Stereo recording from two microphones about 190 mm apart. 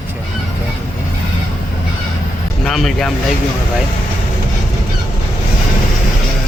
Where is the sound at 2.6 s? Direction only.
Centre (ahead or behind).